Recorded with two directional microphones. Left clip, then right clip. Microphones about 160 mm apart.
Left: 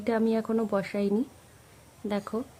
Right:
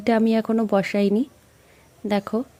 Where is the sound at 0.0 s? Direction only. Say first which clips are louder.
Right 7 dB; 35° right (ahead or behind).